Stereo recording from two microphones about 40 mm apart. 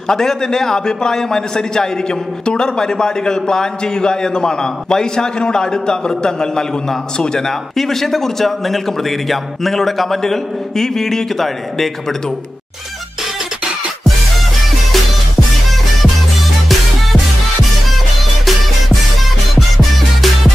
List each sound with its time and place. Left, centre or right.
0.1 s a man's voice: centre